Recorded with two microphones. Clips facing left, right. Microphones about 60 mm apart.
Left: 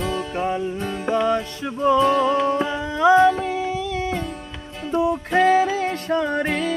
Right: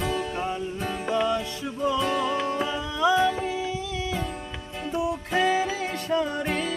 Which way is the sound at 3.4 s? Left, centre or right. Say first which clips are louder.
Left 5 dB; left.